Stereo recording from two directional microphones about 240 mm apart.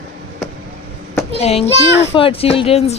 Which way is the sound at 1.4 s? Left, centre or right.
Left.